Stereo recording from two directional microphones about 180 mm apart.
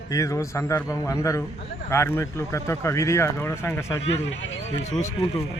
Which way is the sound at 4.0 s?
75° left (ahead or behind).